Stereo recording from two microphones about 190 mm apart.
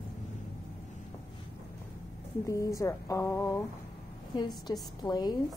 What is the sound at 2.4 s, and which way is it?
Speech, 15° left (ahead or behind).